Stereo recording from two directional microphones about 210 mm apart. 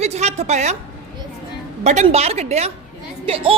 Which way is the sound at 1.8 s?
30° right (ahead or behind).